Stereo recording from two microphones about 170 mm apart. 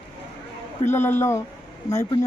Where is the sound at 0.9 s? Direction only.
15° left (ahead or behind).